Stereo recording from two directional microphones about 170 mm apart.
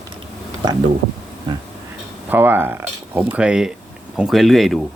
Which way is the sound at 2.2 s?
10° right (ahead or behind).